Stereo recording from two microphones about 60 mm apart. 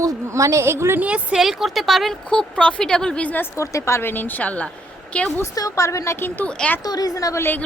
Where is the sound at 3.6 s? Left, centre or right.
Left.